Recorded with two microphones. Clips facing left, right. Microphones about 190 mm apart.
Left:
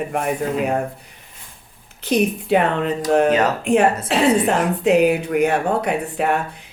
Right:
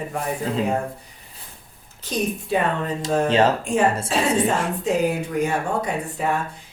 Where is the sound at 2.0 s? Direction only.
65° left (ahead or behind).